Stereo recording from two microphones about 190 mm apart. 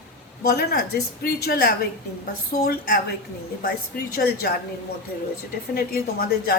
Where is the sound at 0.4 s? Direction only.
55° left (ahead or behind).